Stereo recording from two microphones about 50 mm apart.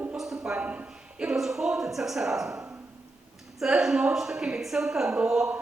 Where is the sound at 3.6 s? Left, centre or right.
Centre.